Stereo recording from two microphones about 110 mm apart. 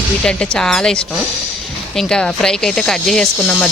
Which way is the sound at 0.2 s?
5° left (ahead or behind).